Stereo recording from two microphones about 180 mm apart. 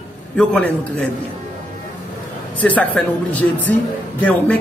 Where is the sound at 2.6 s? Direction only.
10° left (ahead or behind).